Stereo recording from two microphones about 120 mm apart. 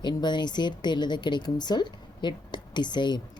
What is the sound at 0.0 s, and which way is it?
Speech, 40° left (ahead or behind).